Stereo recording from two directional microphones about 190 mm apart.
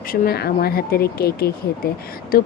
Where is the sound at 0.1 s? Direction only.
55° left (ahead or behind).